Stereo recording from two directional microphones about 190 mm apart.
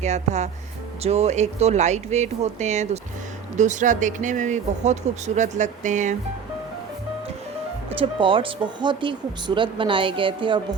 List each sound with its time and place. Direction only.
0.0 s speech: 35° right (ahead or behind)
7.9 s speech: 25° right (ahead or behind)